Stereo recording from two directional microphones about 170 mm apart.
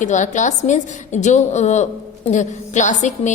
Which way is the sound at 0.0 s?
45° left (ahead or behind).